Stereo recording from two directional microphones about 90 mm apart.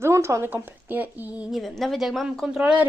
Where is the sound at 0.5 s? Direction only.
20° right (ahead or behind).